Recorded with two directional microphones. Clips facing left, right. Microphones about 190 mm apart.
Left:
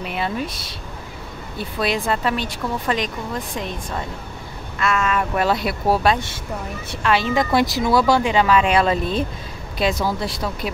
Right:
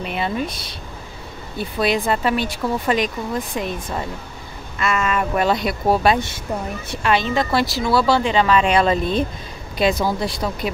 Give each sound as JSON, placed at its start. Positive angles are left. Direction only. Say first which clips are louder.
{"t": 0.0, "sound": "speech", "louder": "right 1 dB", "side_deg": 0}